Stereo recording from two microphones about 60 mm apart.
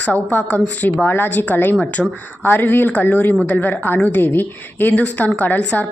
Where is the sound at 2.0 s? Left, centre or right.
Centre.